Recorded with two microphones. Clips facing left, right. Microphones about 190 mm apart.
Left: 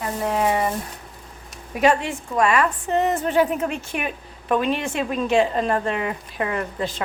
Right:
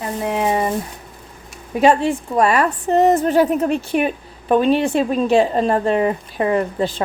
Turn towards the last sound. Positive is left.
turn(degrees=-30)  # may be behind; listen again after turning